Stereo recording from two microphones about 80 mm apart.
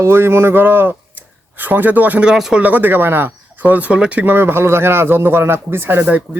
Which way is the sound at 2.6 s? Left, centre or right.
Right.